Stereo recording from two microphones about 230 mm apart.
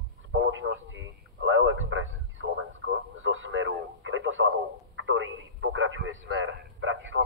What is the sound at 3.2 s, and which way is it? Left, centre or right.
Radio, right.